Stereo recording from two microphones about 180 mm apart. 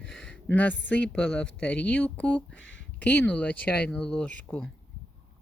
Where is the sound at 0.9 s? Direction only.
5° left (ahead or behind).